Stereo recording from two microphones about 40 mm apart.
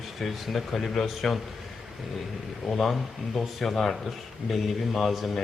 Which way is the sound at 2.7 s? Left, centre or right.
Centre.